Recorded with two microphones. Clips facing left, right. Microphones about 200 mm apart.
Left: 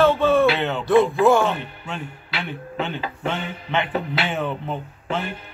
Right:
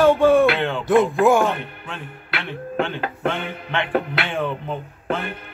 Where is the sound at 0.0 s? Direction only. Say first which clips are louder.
Right 3 dB; 15° right (ahead or behind).